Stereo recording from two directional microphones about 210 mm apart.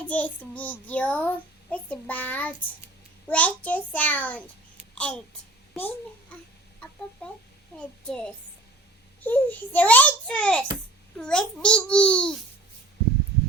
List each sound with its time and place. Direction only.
0.0 s a child's voice: 5° left (ahead or behind)
7.2 s a child's voice: 5° left (ahead or behind)